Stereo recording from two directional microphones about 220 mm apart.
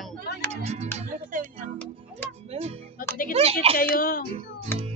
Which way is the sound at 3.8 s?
40° left (ahead or behind).